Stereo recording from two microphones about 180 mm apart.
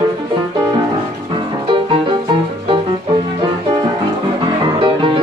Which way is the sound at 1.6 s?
30° right (ahead or behind).